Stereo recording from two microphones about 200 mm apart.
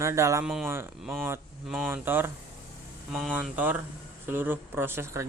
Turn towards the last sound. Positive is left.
turn(degrees=-10)  # may be behind; listen again after turning